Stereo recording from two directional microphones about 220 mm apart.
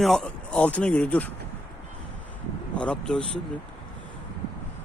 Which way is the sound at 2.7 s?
5° left (ahead or behind).